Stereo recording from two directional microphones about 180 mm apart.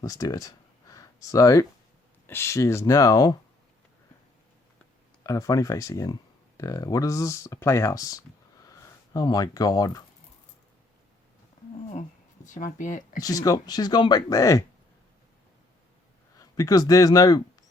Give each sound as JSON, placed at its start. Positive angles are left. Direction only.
{"t": 0.0, "sound": "speech", "side_deg": 20}
{"t": 5.2, "sound": "speech", "side_deg": 20}
{"t": 12.5, "sound": "speech", "side_deg": 45}
{"t": 13.2, "sound": "speech", "side_deg": 20}
{"t": 16.4, "sound": "speech", "side_deg": 20}